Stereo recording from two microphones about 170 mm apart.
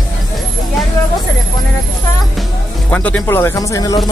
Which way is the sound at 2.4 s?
5° left (ahead or behind).